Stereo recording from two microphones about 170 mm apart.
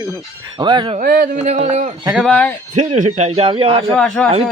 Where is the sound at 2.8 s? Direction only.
45° right (ahead or behind).